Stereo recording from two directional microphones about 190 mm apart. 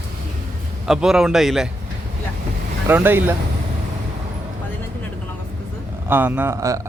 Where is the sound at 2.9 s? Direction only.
10° right (ahead or behind).